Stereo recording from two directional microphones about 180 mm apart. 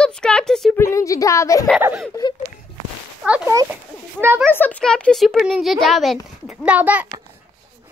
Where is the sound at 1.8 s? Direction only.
10° right (ahead or behind).